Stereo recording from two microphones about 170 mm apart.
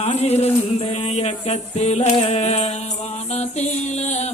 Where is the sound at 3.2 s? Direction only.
40° left (ahead or behind).